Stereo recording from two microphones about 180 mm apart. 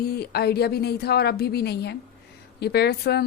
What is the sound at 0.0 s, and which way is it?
Speech, 60° left (ahead or behind).